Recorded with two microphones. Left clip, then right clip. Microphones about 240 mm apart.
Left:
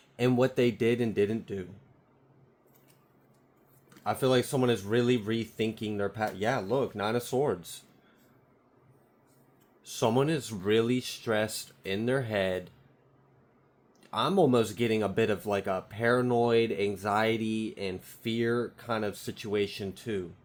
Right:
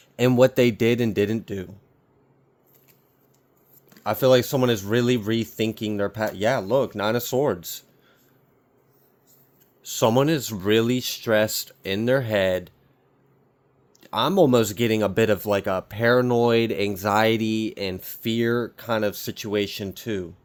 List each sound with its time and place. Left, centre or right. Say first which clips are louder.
0.2 s speech: right 8 dB; right
4.0 s speech: right 8 dB; right
9.8 s speech: right 7 dB; right
14.0 s speech: right 6 dB; right